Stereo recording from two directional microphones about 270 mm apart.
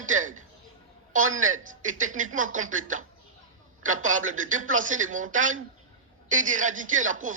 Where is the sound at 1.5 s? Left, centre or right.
Right.